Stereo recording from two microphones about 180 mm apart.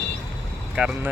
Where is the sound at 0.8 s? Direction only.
5° right (ahead or behind).